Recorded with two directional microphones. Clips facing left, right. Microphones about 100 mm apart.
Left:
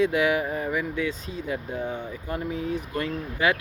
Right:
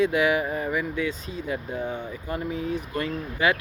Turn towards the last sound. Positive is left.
turn(degrees=-5)  # may be behind; listen again after turning